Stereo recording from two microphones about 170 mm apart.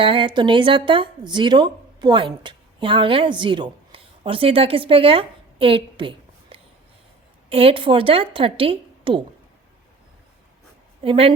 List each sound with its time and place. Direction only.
0.0 s a woman's voice: 30° right (ahead or behind)
11.0 s a woman's voice: 30° right (ahead or behind)